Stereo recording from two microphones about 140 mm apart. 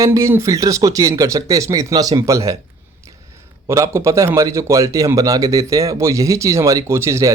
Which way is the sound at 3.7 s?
20° right (ahead or behind).